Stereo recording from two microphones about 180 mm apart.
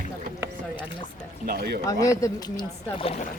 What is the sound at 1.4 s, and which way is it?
Speech, 55° right (ahead or behind).